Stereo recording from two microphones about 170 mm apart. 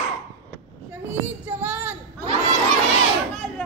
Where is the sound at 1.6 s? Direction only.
10° right (ahead or behind).